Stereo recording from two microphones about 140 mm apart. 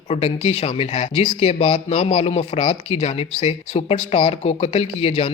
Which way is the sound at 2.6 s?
55° left (ahead or behind).